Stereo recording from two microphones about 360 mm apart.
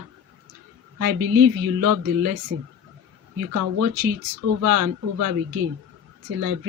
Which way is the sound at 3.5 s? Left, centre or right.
Right.